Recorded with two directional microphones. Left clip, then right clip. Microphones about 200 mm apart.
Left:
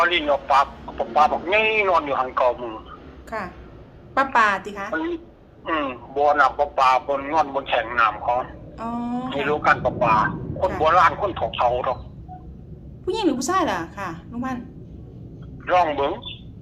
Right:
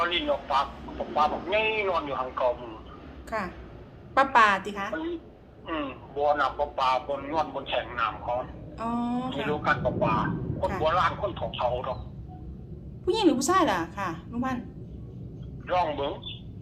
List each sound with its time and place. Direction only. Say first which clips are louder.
0.0 s speech: left 7 dB; 55° left (ahead or behind)
3.2 s a woman's voice: left 2 dB; centre (ahead or behind)
4.9 s speech: left 7 dB; 55° left (ahead or behind)
8.8 s a woman's voice: left 2 dB; centre (ahead or behind)
9.3 s speech: left 9 dB; 55° left (ahead or behind)
13.1 s a woman's voice: left 1 dB; centre (ahead or behind)
15.6 s a man's voice: left 8 dB; 55° left (ahead or behind)